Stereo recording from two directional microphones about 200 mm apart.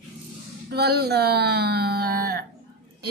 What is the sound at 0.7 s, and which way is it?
A woman's voice, 55° right (ahead or behind).